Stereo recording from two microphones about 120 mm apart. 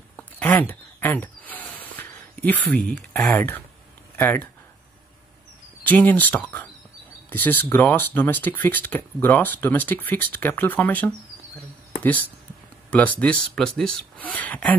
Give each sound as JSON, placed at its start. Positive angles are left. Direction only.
{"t": 0.1, "sound": "a sound", "side_deg": 10}
{"t": 4.2, "sound": "speech", "side_deg": 15}
{"t": 5.9, "sound": "speech", "side_deg": 15}